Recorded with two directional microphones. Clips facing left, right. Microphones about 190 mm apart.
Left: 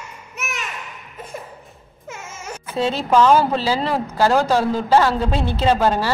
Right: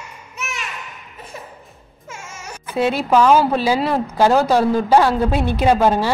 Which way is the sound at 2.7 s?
10° right (ahead or behind).